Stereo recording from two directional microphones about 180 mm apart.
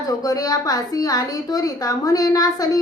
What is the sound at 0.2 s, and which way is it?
A woman's voice, 20° left (ahead or behind).